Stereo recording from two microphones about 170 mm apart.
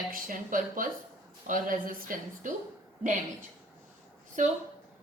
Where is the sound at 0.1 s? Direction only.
55° right (ahead or behind).